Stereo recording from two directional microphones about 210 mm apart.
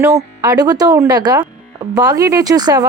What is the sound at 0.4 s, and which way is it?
Speech, 20° right (ahead or behind).